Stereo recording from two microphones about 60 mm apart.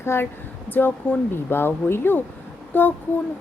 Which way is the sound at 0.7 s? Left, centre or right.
Left.